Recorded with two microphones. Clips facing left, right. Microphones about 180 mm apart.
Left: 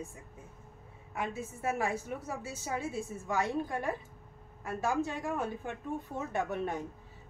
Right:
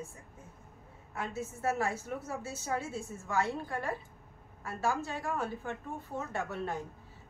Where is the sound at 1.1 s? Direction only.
15° left (ahead or behind).